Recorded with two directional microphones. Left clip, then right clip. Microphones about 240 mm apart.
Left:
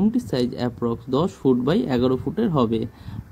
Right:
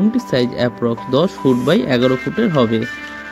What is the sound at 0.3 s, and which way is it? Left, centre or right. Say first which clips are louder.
Speech: right 8 dB; centre.